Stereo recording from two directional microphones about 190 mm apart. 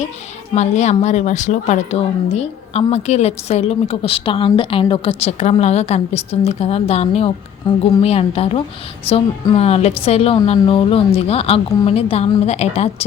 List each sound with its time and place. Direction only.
0.5 s a woman's voice: 35° left (ahead or behind)